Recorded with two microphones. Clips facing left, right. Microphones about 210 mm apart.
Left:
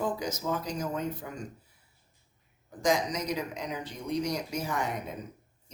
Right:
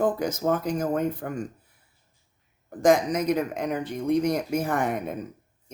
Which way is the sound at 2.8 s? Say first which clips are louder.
Right 8 dB; 55° right (ahead or behind).